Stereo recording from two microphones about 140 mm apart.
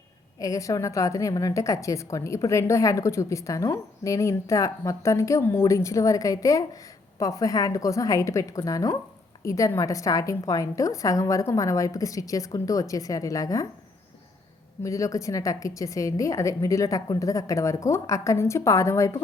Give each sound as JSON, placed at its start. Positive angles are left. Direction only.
{"t": 0.3, "sound": "a woman's voice", "side_deg": 25}
{"t": 14.8, "sound": "a woman's voice", "side_deg": 20}